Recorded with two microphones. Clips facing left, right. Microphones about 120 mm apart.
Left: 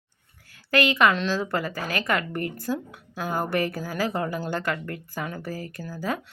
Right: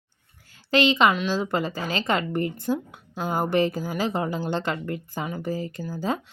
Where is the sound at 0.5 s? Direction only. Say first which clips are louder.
Right 2 dB; 20° right (ahead or behind).